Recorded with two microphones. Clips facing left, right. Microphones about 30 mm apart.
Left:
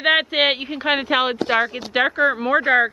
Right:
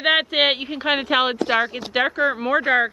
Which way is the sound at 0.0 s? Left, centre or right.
Centre.